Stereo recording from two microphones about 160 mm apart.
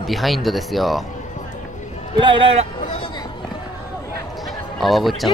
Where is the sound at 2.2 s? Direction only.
30° right (ahead or behind).